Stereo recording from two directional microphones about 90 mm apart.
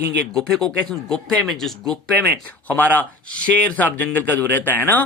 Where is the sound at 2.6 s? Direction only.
20° left (ahead or behind).